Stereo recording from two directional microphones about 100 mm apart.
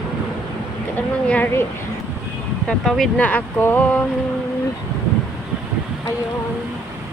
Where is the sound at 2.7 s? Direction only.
5° left (ahead or behind).